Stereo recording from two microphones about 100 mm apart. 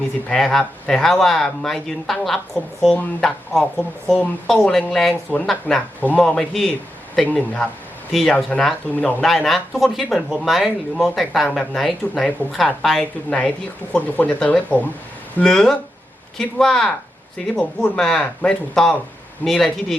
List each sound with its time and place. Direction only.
0.3 s speech: 5° left (ahead or behind)
8.1 s speech: centre (ahead or behind)
9.2 s speech: centre (ahead or behind)